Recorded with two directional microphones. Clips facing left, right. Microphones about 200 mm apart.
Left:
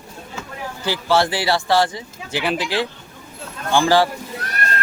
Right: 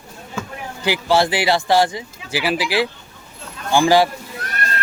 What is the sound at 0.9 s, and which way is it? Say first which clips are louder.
A man's voice: right 2 dB; 15° right (ahead or behind).